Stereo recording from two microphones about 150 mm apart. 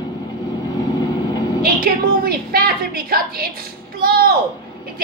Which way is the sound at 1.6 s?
90° right.